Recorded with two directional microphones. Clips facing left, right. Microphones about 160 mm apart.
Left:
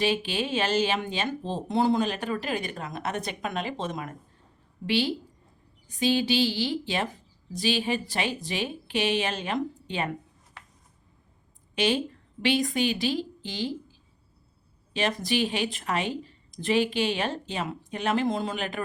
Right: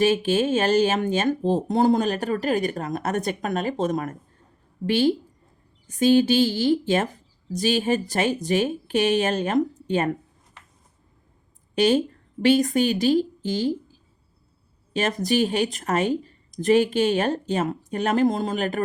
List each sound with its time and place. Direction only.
0.0 s speech: 45° right (ahead or behind)
11.7 s a woman's voice: 40° right (ahead or behind)
14.9 s speech: 45° right (ahead or behind)